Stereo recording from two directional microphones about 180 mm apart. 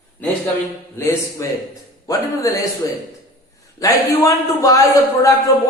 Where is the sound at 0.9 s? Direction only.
15° left (ahead or behind).